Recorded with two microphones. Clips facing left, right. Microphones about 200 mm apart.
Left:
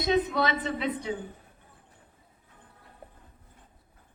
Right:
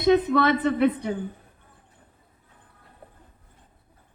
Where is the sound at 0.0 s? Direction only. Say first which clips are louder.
Right 6 dB; 60° right (ahead or behind).